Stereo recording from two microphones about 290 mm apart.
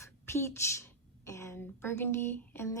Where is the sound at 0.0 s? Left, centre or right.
Centre.